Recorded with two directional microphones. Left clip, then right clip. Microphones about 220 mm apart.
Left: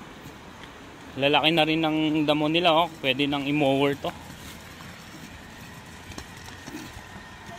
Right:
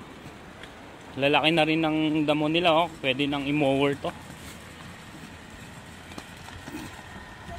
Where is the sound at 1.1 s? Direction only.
Centre (ahead or behind).